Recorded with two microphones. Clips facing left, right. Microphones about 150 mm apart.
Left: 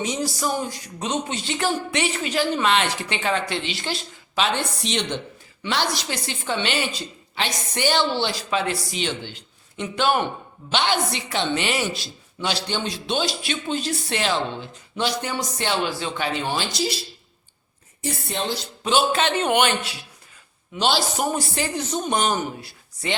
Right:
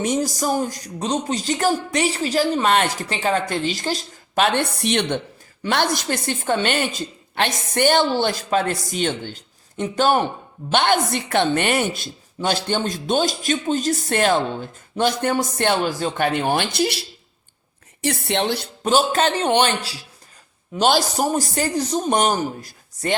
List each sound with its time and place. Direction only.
0.0 s a woman's voice: 50° right (ahead or behind)
10.7 s a woman's voice: 50° right (ahead or behind)
18.0 s a woman's voice: 75° right (ahead or behind)
18.8 s a woman's voice: 45° right (ahead or behind)
19.5 s a man's voice: 30° right (ahead or behind)
20.7 s a man's voice: 45° right (ahead or behind)